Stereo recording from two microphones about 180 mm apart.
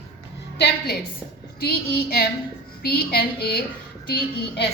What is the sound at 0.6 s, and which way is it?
A woman's voice, 60° left (ahead or behind).